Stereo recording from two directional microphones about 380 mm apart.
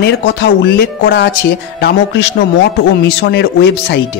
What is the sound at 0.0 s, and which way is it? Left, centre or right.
Speech, left.